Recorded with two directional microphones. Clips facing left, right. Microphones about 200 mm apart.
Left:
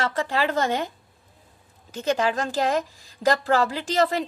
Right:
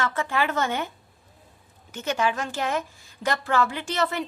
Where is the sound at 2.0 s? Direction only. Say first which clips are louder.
Left 3 dB; 35° left (ahead or behind).